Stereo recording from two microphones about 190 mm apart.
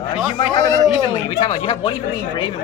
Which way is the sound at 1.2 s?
25° left (ahead or behind).